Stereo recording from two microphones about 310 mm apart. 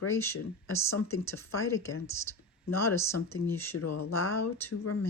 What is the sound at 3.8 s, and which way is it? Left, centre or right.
Speech, left.